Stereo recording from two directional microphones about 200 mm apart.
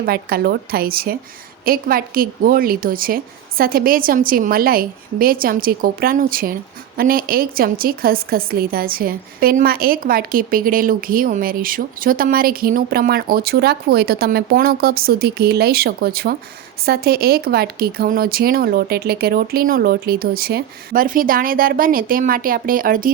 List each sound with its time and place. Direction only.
0.0 s a woman's voice: 50° right (ahead or behind)